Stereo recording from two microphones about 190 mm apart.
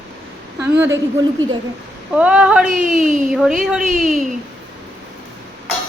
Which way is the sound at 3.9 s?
40° right (ahead or behind).